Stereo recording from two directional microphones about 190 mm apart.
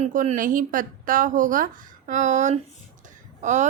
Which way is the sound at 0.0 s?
40° right (ahead or behind).